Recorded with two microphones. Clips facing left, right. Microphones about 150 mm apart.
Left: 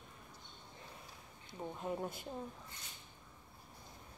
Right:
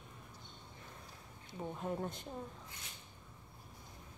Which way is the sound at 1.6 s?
Centre (ahead or behind).